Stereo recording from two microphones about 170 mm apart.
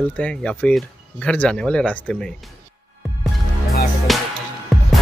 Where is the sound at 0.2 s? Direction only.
5° left (ahead or behind).